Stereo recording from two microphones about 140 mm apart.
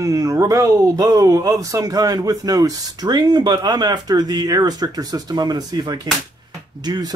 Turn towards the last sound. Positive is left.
turn(degrees=-30)  # may be behind; listen again after turning